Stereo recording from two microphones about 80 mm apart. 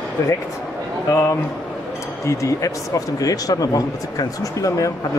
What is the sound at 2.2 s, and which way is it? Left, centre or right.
Speech, left.